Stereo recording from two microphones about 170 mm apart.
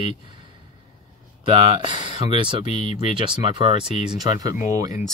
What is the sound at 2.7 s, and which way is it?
Speech, 40° left (ahead or behind).